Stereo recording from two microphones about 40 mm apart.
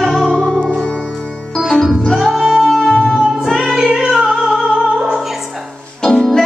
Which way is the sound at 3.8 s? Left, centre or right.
Centre.